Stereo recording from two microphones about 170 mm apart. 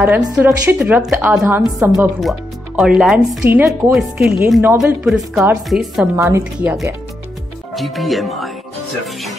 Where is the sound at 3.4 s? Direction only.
15° right (ahead or behind).